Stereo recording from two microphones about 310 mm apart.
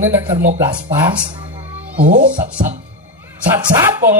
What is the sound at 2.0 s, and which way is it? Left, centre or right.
Speech, right.